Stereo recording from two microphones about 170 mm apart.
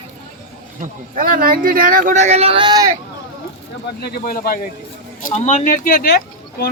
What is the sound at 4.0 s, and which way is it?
Speech, 65° left (ahead or behind).